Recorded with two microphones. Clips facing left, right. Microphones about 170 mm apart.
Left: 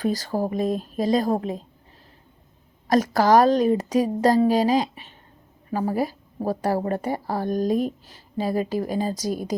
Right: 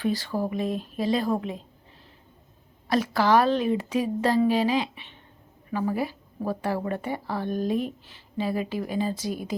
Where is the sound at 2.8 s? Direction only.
45° left (ahead or behind).